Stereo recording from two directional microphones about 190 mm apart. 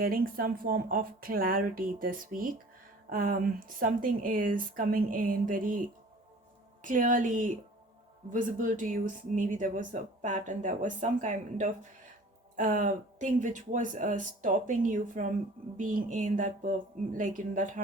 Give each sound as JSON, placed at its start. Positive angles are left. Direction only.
{"t": 0.0, "sound": "speech", "side_deg": -50}
{"t": 6.8, "sound": "speech", "side_deg": -45}